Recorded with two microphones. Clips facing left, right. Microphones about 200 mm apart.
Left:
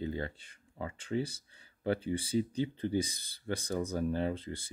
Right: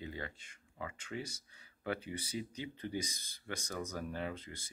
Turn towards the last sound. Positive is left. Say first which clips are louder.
# left 7 dB
turn(degrees=30)  # may be behind; listen again after turning